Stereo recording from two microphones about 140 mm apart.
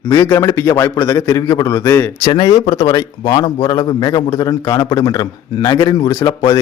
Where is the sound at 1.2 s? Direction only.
25° left (ahead or behind).